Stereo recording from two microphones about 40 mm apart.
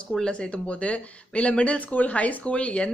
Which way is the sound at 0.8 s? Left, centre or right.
Left.